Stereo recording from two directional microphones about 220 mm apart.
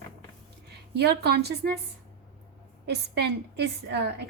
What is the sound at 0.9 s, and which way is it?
Speech, 50° right (ahead or behind).